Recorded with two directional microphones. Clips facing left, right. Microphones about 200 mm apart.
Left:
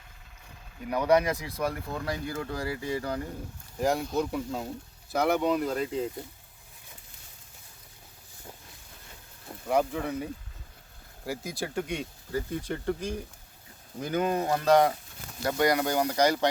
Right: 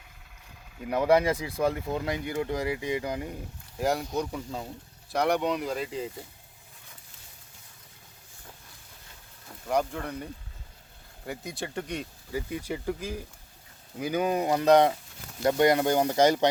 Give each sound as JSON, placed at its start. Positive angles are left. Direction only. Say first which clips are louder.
{"t": 0.9, "sound": "speech", "louder": "right 1 dB", "side_deg": -25}
{"t": 3.8, "sound": "speech", "louder": "left 1 dB", "side_deg": 0}
{"t": 9.6, "sound": "speech", "louder": "left 2 dB", "side_deg": 5}
{"t": 11.3, "sound": "speech", "louder": "left 2 dB", "side_deg": 0}